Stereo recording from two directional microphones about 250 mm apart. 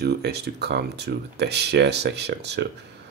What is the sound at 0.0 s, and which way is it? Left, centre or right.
Speech, right.